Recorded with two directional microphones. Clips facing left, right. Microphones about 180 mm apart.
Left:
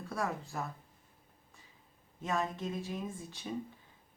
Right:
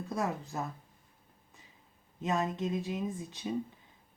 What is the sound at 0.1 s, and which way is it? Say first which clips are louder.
Speech: right 2 dB; 20° right (ahead or behind).